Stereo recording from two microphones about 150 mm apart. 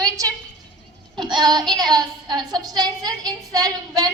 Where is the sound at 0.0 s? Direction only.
25° right (ahead or behind).